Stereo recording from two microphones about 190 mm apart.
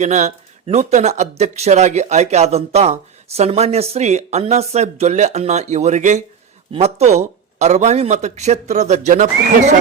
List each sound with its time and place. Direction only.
0.0 s speech: 35° right (ahead or behind)